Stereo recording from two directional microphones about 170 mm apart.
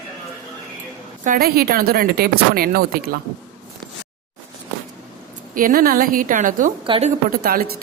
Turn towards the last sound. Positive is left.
turn(degrees=-65)  # may be behind; listen again after turning